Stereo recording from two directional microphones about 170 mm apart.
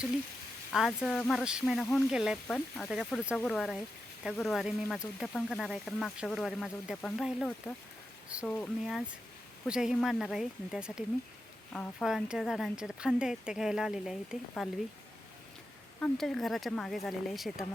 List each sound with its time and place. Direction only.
0.7 s speech: centre (ahead or behind)
8.4 s speech: 10° left (ahead or behind)
16.0 s speech: 5° left (ahead or behind)